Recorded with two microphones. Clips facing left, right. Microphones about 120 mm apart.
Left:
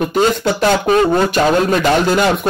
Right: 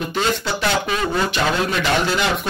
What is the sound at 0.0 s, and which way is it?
A man's voice, 50° left (ahead or behind).